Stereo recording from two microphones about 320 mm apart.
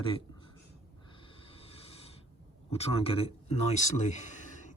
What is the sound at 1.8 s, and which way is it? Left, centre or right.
Snort, centre.